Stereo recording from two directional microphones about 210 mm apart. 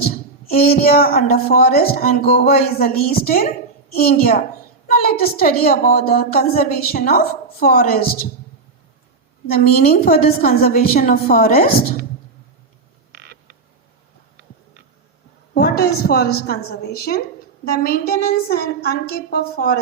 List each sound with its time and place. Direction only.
0.5 s a woman's voice: 45° left (ahead or behind)
10.0 s a woman's voice: 45° left (ahead or behind)
13.1 s creak: 50° right (ahead or behind)
15.5 s a woman's voice: 45° left (ahead or behind)